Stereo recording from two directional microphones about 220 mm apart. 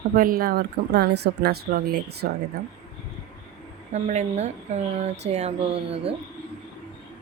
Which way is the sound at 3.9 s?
30° right (ahead or behind).